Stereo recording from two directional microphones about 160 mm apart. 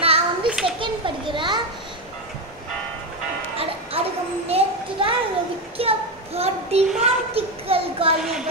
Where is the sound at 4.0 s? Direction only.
40° right (ahead or behind).